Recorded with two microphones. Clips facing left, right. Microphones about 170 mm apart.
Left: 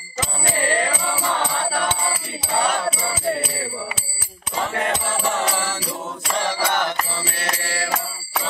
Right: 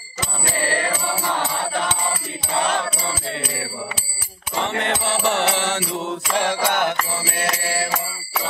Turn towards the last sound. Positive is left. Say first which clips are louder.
# right 2 dB
turn(degrees=-55)  # may be behind; listen again after turning